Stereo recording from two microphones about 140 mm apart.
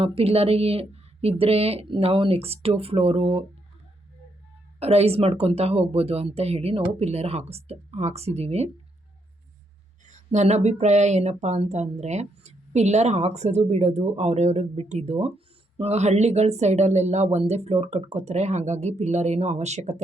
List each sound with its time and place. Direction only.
0.0 s speech: 40° right (ahead or behind)
4.8 s speech: 45° right (ahead or behind)
10.1 s speech: 55° right (ahead or behind)